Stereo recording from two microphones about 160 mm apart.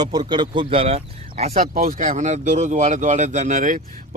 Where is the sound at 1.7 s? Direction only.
60° right (ahead or behind).